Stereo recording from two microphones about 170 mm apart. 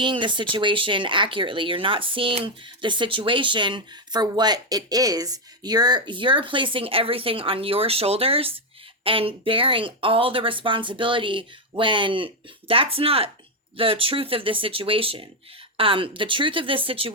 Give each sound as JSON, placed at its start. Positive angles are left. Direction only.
{"t": 0.0, "sound": "speech", "side_deg": -30}